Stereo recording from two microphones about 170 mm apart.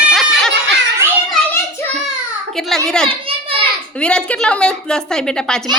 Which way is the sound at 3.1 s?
35° right (ahead or behind).